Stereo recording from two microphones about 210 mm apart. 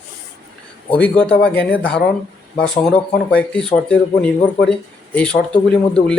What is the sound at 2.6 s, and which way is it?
Speech, 5° left (ahead or behind).